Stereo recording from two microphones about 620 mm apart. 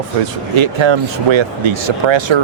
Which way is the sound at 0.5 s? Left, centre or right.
Right.